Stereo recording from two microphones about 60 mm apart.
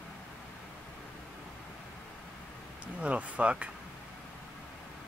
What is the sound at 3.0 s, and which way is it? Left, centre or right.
Speech, right.